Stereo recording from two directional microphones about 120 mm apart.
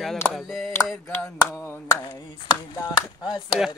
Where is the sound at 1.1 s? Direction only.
20° left (ahead or behind).